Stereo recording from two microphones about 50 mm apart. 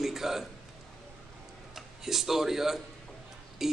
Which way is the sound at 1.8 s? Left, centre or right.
Centre.